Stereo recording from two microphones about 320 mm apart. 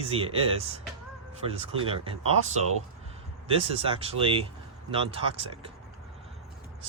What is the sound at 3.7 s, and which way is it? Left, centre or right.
Speech, centre.